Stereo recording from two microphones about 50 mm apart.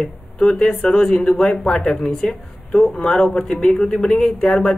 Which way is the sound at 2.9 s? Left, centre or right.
Centre.